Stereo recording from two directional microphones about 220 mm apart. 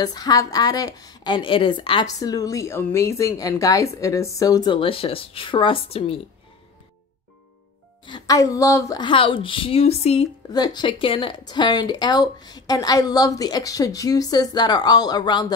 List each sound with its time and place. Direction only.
0.0 s a woman's voice: 15° left (ahead or behind)
8.0 s a woman's voice: 20° left (ahead or behind)